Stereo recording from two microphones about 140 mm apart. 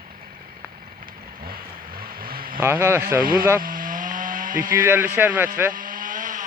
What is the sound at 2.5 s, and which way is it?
Speech, 15° right (ahead or behind).